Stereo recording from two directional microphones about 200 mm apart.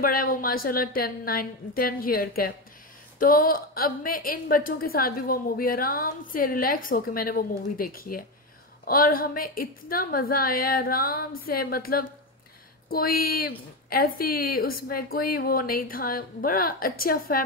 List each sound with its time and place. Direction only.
0.0 s a woman's voice: 45° left (ahead or behind)